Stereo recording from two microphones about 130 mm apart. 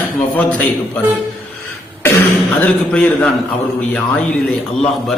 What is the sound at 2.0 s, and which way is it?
Throat clearing, 15° left (ahead or behind).